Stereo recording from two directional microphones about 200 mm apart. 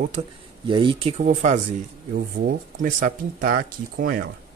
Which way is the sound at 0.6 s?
25° right (ahead or behind).